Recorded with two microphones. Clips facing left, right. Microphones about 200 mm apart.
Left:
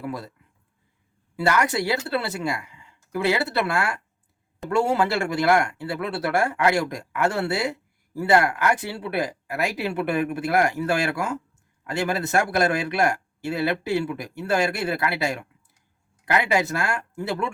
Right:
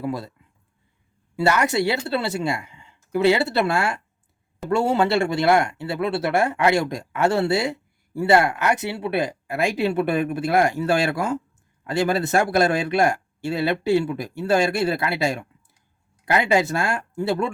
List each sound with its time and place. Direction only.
0.0 s speech: 25° right (ahead or behind)
1.4 s speech: 25° right (ahead or behind)